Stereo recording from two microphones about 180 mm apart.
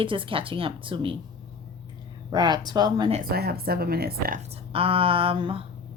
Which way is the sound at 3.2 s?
60° right (ahead or behind).